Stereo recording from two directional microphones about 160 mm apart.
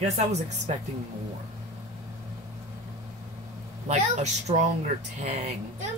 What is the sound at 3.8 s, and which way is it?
A woman's voice, 45° right (ahead or behind).